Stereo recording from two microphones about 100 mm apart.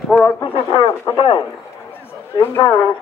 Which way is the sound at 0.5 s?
55° left (ahead or behind).